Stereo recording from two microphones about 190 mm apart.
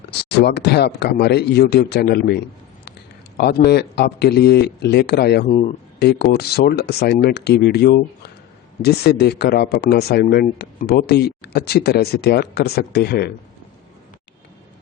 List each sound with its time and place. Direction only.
0.1 s speech: 60° left (ahead or behind)
5.5 s speech: 35° left (ahead or behind)
6.0 s speech: 60° left (ahead or behind)